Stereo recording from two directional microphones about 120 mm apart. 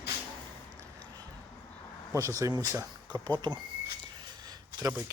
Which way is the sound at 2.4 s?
30° right (ahead or behind).